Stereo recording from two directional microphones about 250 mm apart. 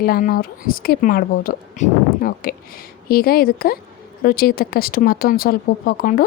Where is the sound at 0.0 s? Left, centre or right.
Left.